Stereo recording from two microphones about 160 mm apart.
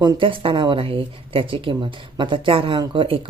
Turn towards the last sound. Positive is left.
turn(degrees=-30)  # may be behind; listen again after turning